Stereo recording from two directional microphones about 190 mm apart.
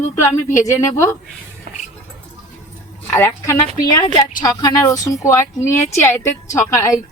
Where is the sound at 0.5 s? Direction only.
15° left (ahead or behind).